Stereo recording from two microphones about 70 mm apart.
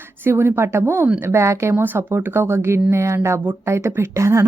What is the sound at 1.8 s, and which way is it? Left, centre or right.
Speech, right.